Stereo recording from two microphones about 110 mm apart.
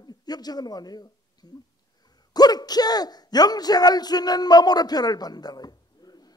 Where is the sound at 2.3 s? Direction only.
35° left (ahead or behind).